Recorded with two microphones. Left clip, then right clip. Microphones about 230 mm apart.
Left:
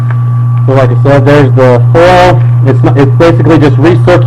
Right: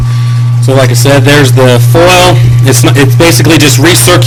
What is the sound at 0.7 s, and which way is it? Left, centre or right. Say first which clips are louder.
Music: right 1 dB; right.